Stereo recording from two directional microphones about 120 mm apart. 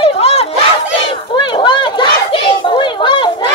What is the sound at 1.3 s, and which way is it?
Children playing, 40° left (ahead or behind).